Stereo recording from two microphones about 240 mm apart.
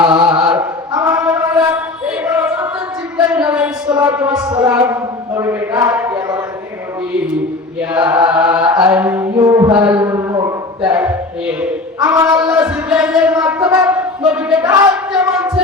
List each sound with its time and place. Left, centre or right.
0.1 s chant: centre
1.2 s music: centre
3.2 s a sound: centre
4.4 s speech: centre
7.9 s chant: centre
9.0 s mantra: centre
12.1 s a sound: centre
12.4 s wind instrument: centre
14.3 s a sound: centre
14.7 s speech: centre
15.1 s music: centre